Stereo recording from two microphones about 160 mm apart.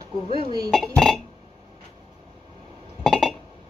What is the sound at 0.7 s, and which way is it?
Speech, centre (ahead or behind).